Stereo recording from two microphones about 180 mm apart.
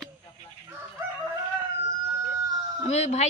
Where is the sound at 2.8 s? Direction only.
40° left (ahead or behind).